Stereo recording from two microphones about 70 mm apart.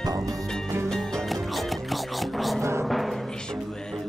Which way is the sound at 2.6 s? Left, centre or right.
Right.